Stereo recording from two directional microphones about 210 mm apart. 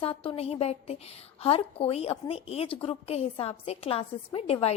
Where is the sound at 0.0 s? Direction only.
25° left (ahead or behind).